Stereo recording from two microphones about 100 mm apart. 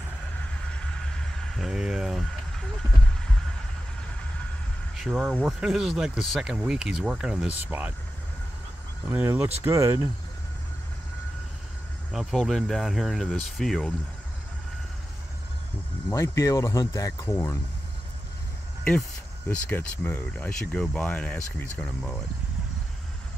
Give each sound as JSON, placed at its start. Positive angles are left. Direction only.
{"t": 0.7, "sound": "vehicle", "side_deg": 10}
{"t": 4.9, "sound": "speech", "side_deg": -5}
{"t": 7.6, "sound": "speech", "side_deg": -15}
{"t": 9.0, "sound": "speech", "side_deg": -15}
{"t": 12.1, "sound": "speech", "side_deg": 0}
{"t": 16.1, "sound": "speech", "side_deg": 30}
{"t": 19.4, "sound": "speech", "side_deg": 20}